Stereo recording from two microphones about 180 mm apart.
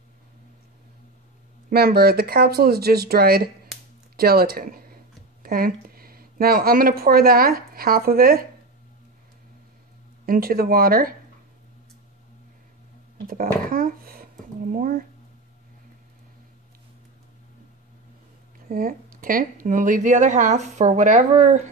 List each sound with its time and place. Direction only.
1.7 s speech: 60° right (ahead or behind)
10.2 s speech: 55° right (ahead or behind)
13.7 s a woman's voice: 50° right (ahead or behind)
18.7 s a woman's voice: 50° right (ahead or behind)